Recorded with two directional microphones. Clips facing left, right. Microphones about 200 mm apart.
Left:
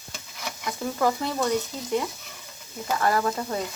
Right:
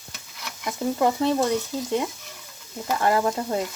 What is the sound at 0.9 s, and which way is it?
Stir, 25° right (ahead or behind).